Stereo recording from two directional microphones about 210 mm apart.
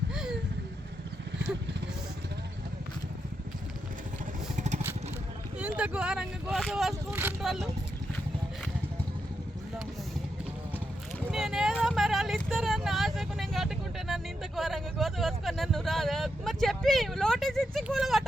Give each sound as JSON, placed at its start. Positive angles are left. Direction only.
{"t": 0.1, "sound": "vehicle", "side_deg": -5}
{"t": 4.5, "sound": "vehicle", "side_deg": -35}
{"t": 5.5, "sound": "speech", "side_deg": -5}
{"t": 11.3, "sound": "vehicle", "side_deg": 0}